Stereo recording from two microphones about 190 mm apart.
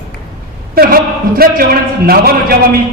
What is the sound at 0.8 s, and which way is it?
Speech, 50° right (ahead or behind).